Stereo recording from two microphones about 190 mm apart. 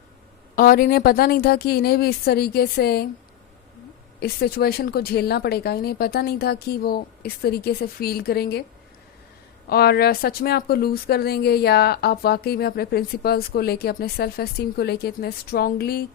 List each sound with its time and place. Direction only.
0.5 s speech: 50° left (ahead or behind)
4.2 s speech: 55° left (ahead or behind)
9.6 s speech: 55° left (ahead or behind)